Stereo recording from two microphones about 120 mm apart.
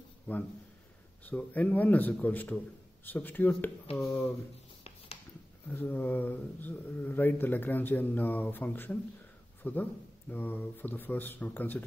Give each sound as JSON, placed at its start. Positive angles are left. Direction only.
{"t": 0.3, "sound": "speech", "side_deg": 15}
{"t": 4.8, "sound": "a sound", "side_deg": 55}
{"t": 5.7, "sound": "a man's voice", "side_deg": 15}